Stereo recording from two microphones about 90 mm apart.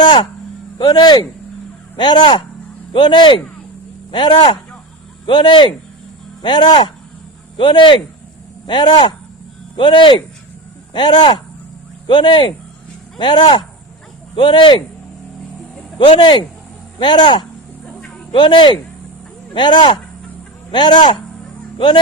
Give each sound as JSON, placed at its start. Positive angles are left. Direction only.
{"t": 0.0, "sound": "a sound", "side_deg": 65}
{"t": 0.8, "sound": "speech", "side_deg": 55}
{"t": 6.4, "sound": "a man's voice", "side_deg": 55}
{"t": 16.0, "sound": "speech", "side_deg": 60}
{"t": 18.3, "sound": "speech", "side_deg": 70}
{"t": 19.5, "sound": "speech", "side_deg": 55}